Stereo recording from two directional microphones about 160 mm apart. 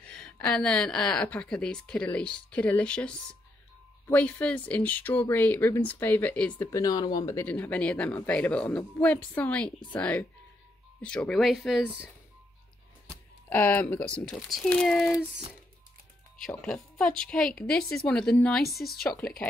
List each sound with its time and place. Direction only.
0.0 s speech: 5° left (ahead or behind)
6.7 s speech: 25° left (ahead or behind)
7.3 s speech: 10° left (ahead or behind)
13.5 s speech: 10° left (ahead or behind)
16.4 s speech: 5° left (ahead or behind)